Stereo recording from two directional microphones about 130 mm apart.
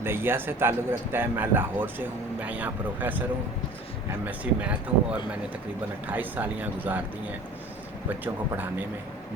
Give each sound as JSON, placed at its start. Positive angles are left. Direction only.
{"t": 0.0, "sound": "speech", "side_deg": -15}
{"t": 4.3, "sound": "speech", "side_deg": -10}